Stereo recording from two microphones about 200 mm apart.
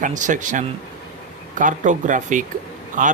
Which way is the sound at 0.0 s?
40° right (ahead or behind).